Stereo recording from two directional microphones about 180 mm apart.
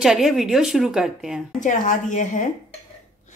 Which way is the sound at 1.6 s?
45° left (ahead or behind).